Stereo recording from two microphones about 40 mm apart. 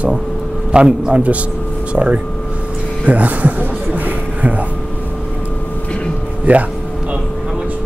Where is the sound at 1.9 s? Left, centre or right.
Right.